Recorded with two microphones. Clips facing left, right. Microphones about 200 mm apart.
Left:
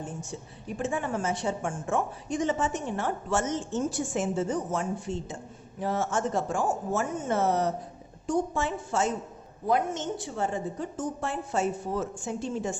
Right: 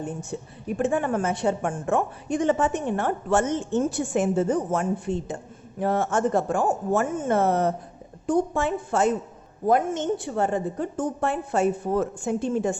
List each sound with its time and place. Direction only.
0.0 s a woman's voice: 60° right (ahead or behind)